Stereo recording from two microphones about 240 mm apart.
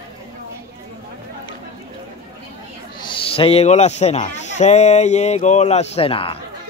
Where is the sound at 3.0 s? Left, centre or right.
Left.